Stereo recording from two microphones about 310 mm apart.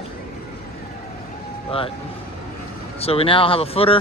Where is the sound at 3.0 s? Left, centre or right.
Centre.